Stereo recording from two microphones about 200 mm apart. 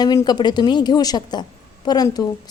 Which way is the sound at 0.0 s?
20° left (ahead or behind).